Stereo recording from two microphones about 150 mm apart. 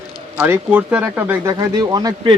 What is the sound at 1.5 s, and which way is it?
Speech, 25° right (ahead or behind).